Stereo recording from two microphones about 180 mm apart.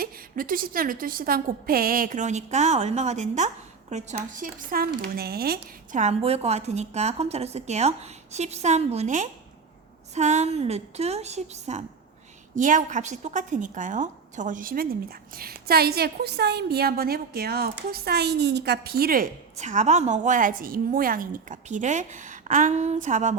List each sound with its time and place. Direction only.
0.0 s a woman's voice: 50° right (ahead or behind)